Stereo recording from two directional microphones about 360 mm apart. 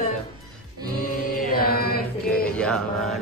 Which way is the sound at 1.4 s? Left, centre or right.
Left.